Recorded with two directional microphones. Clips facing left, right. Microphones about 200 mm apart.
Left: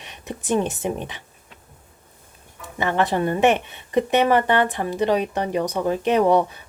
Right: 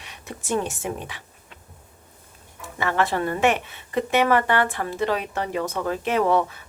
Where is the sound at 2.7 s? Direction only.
20° left (ahead or behind).